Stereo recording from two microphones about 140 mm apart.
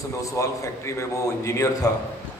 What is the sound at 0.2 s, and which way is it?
A man's voice, 20° left (ahead or behind).